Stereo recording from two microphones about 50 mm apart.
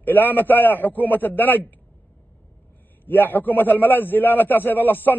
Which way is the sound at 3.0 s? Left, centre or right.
Left.